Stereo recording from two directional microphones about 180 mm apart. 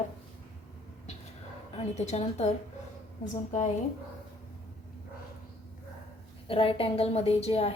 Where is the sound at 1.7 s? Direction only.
40° left (ahead or behind).